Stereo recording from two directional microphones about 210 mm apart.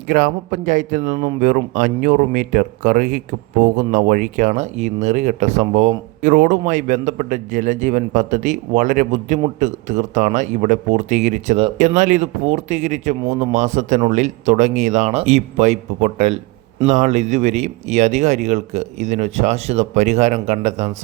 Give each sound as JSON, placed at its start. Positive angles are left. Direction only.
{"t": 0.1, "sound": "a man's voice", "side_deg": -40}